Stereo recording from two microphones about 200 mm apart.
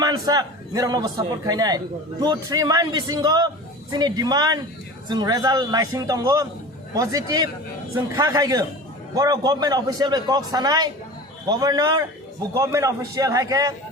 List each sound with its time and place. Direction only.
0.0 s a man's voice: 20° right (ahead or behind)